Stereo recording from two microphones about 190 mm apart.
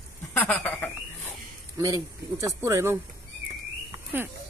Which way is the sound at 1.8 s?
15° right (ahead or behind).